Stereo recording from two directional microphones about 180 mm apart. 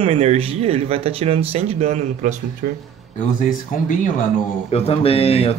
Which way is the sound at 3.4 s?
50° left (ahead or behind).